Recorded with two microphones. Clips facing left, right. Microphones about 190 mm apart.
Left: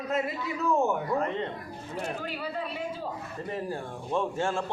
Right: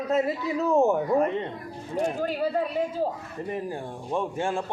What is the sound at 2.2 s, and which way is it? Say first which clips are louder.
Speech: right 8 dB; 45° right (ahead or behind).